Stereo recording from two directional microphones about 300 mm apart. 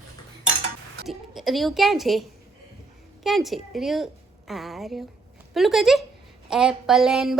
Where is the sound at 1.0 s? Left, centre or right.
Centre.